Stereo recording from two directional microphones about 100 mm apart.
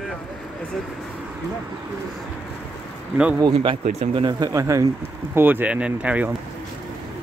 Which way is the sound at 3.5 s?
70° right (ahead or behind).